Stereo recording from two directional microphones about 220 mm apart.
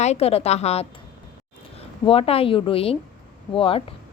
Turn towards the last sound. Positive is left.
turn(degrees=25)  # may be behind; listen again after turning